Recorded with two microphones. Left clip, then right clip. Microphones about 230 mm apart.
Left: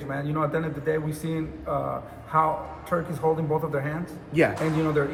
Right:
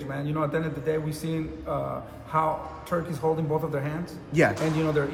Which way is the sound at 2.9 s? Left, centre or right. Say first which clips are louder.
Left 2 dB; centre.